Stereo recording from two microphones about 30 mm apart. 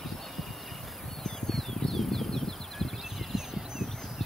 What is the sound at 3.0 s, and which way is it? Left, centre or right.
Horse, centre.